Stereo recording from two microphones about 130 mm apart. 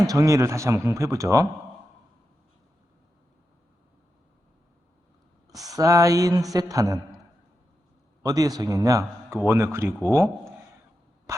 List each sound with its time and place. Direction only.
0.0 s speech: 25° right (ahead or behind)
5.5 s speech: 25° right (ahead or behind)
8.2 s speech: 30° right (ahead or behind)
11.3 s a sound: 25° right (ahead or behind)